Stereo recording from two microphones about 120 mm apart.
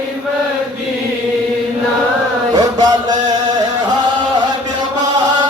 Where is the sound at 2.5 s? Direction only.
35° right (ahead or behind).